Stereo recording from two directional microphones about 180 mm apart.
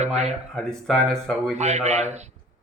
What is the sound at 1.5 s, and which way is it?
Speech, 40° right (ahead or behind).